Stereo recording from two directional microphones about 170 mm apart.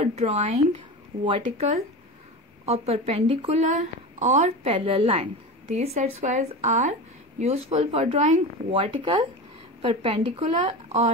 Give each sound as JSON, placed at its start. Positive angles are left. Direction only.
{"t": 0.0, "sound": "a woman's voice", "side_deg": -40}